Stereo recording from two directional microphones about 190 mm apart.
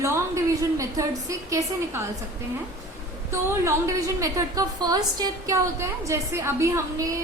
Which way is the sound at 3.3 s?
15° right (ahead or behind).